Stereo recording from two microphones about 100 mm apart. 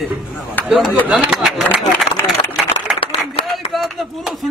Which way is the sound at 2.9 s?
65° left (ahead or behind).